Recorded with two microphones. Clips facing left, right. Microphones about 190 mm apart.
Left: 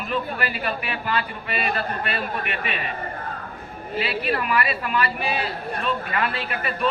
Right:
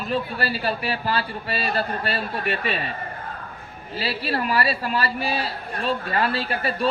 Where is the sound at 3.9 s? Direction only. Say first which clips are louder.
Left 1 dB; 35° right (ahead or behind).